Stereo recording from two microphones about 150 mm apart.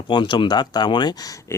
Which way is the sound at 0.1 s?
30° left (ahead or behind).